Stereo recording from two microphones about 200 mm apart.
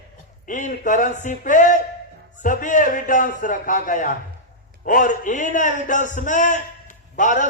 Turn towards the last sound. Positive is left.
turn(degrees=40)  # may be behind; listen again after turning